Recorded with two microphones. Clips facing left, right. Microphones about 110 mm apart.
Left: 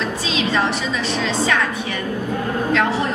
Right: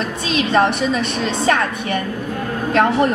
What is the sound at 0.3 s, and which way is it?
A woman's voice, 55° right (ahead or behind).